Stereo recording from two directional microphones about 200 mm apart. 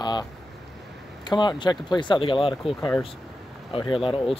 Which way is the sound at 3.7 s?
25° left (ahead or behind).